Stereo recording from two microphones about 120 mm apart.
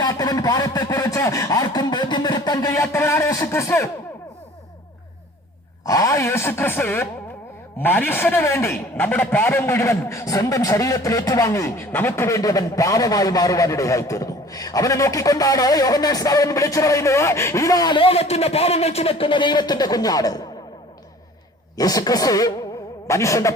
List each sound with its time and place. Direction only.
0.0 s a man's voice: 30° left (ahead or behind)
2.8 s a man's voice: 20° left (ahead or behind)
5.8 s a man's voice: 30° left (ahead or behind)
18.0 s a man's voice: 55° left (ahead or behind); by 20.5 s 30° left (ahead or behind)
21.8 s a man's voice: 30° left (ahead or behind)